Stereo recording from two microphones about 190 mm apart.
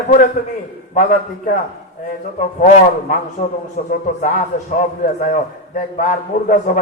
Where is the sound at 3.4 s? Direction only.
45° left (ahead or behind).